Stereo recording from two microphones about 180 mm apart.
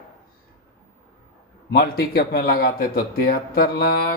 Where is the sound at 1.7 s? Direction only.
65° left (ahead or behind).